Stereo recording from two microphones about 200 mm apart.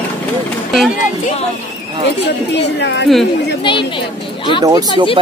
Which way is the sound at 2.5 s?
60° left (ahead or behind).